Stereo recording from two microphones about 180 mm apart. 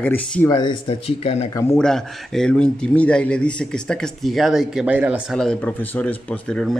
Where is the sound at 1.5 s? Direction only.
15° left (ahead or behind).